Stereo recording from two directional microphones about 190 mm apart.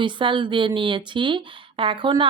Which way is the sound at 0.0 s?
25° right (ahead or behind).